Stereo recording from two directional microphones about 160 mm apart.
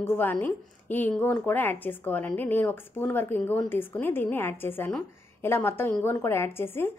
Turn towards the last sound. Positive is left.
turn(degrees=15)  # may be behind; listen again after turning